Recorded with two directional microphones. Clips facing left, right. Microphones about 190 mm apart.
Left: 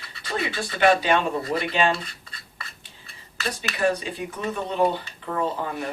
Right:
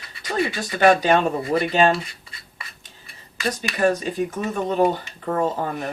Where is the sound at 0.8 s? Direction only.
45° right (ahead or behind).